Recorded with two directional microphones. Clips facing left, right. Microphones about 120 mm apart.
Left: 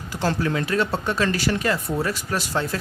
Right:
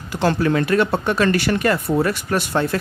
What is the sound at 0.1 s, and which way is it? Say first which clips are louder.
Speech: right 5 dB; 65° right (ahead or behind).